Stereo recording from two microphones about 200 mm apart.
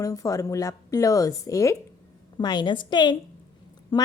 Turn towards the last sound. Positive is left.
turn(degrees=20)  # may be behind; listen again after turning